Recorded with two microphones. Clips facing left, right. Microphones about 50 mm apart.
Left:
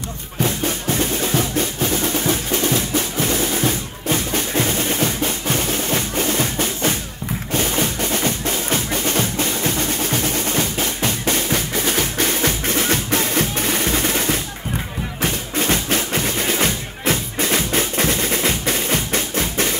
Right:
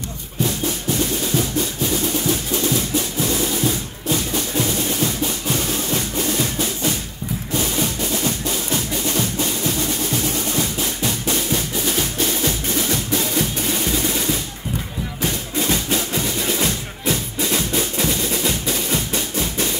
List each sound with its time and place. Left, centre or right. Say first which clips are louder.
0.4 s percussion: left 1 dB; left
7.5 s music: left 2 dB; left